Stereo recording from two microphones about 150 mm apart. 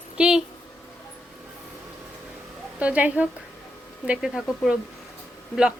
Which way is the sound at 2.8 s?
10° right (ahead or behind).